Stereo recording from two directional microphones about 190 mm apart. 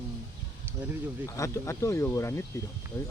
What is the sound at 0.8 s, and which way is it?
Speech, 10° right (ahead or behind).